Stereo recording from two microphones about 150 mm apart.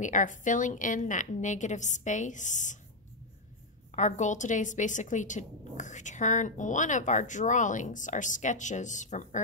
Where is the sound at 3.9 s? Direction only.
55° left (ahead or behind).